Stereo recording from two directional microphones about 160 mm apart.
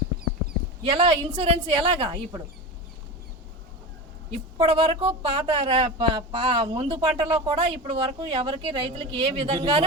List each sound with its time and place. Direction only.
0.9 s speech: 35° right (ahead or behind)
4.5 s speech: 35° right (ahead or behind)